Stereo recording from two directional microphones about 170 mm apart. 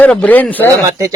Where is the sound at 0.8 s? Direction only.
20° right (ahead or behind).